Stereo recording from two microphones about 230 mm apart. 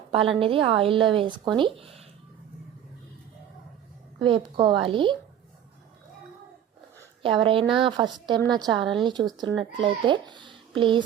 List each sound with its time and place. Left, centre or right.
0.1 s speech: right
4.2 s speech: right
7.2 s speech: right